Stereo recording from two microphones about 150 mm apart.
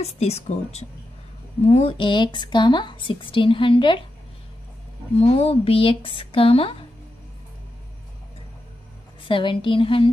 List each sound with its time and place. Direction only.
0.0 s speech: 45° left (ahead or behind)
5.1 s speech: 45° left (ahead or behind)
9.3 s speech: 35° left (ahead or behind)